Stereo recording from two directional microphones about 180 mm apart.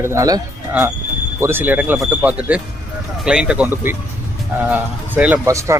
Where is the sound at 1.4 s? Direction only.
10° right (ahead or behind).